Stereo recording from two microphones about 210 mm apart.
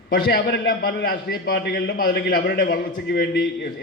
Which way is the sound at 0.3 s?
55° left (ahead or behind).